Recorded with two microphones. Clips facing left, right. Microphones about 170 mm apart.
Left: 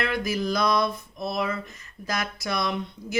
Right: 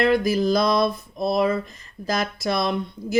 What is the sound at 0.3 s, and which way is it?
Speech, 30° right (ahead or behind).